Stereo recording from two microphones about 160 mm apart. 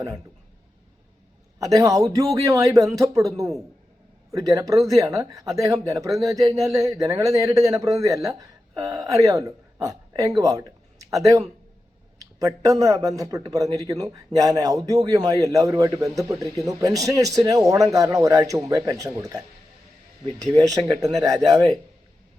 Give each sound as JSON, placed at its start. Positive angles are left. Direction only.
{"t": 1.5, "sound": "speech", "side_deg": -20}
{"t": 21.0, "sound": "speech", "side_deg": -20}